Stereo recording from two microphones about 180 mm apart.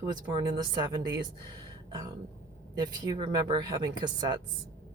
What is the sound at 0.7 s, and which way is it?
Speech, 25° right (ahead or behind).